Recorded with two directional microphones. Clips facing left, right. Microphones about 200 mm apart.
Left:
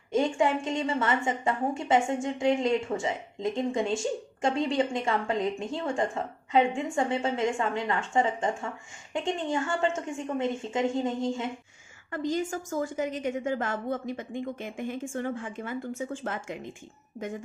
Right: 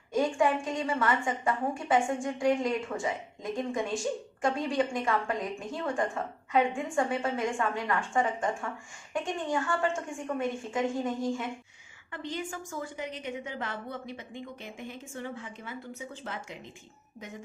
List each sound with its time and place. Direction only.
0.1 s a woman's voice: 25° left (ahead or behind)
12.1 s a woman's voice: 40° left (ahead or behind)